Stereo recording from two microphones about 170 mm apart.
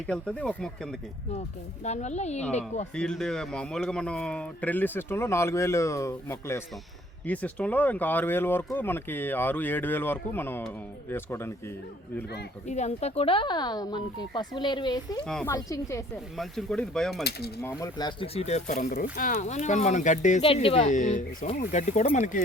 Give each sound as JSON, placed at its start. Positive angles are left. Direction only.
{"t": 0.1, "sound": "speech", "side_deg": 5}
{"t": 1.8, "sound": "speech", "side_deg": 40}
{"t": 2.9, "sound": "speech", "side_deg": 5}
{"t": 12.6, "sound": "speech", "side_deg": 40}
{"t": 15.2, "sound": "speech", "side_deg": 5}
{"t": 15.4, "sound": "speech", "side_deg": 20}
{"t": 16.4, "sound": "speech", "side_deg": 0}
{"t": 17.6, "sound": "speech", "side_deg": 15}
{"t": 18.3, "sound": "speech", "side_deg": 40}
{"t": 20.4, "sound": "speech", "side_deg": 30}